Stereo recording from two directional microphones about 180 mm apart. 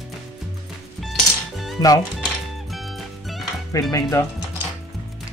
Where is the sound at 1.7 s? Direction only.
20° left (ahead or behind).